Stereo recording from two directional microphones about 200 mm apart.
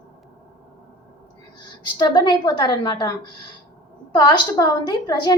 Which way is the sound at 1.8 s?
25° left (ahead or behind).